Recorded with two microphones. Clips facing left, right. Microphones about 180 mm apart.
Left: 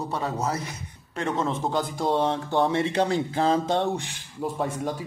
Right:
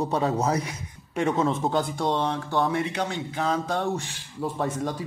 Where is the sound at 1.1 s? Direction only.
10° right (ahead or behind).